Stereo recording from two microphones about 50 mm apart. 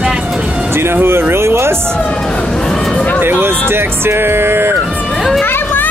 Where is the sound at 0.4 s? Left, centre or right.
Right.